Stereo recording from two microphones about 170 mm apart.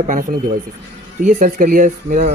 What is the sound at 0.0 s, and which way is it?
Speech, 50° right (ahead or behind).